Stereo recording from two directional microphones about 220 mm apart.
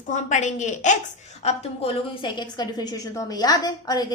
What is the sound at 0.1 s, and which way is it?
A woman's voice, 35° left (ahead or behind).